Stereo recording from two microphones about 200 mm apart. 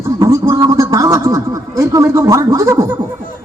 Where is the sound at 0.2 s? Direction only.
15° right (ahead or behind).